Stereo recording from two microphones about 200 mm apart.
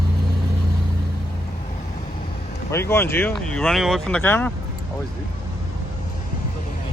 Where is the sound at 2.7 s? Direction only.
15° left (ahead or behind).